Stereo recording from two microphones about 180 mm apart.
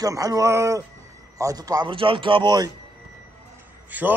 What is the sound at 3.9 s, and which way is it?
Speech, 10° right (ahead or behind).